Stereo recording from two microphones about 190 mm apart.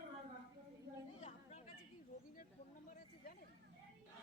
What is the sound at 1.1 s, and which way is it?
Chatter, 35° left (ahead or behind).